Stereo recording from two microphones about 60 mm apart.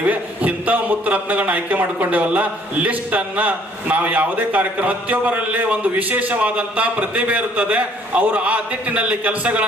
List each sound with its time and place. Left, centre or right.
0.1 s a man's voice: right